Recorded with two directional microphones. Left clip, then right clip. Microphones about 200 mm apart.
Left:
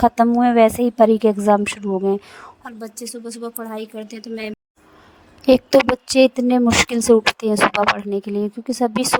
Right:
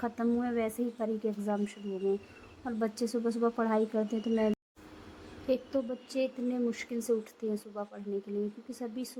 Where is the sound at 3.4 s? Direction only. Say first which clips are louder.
Even; centre (ahead or behind).